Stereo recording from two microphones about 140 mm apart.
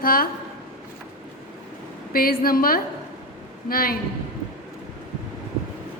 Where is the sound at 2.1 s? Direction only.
90° left.